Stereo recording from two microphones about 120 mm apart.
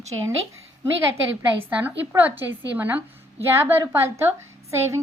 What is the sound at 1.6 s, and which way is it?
A woman's voice, 15° right (ahead or behind).